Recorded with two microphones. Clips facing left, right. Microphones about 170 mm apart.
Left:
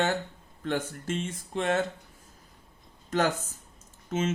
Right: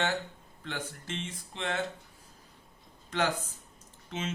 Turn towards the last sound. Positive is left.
turn(degrees=45)  # may be behind; listen again after turning